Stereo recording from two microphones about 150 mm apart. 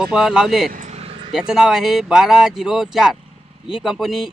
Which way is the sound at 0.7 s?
50° right (ahead or behind).